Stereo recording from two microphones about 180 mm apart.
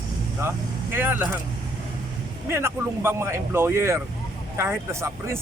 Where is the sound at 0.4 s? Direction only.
10° right (ahead or behind).